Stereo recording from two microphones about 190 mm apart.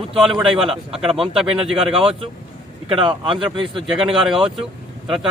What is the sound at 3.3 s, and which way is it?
Speech, centre (ahead or behind).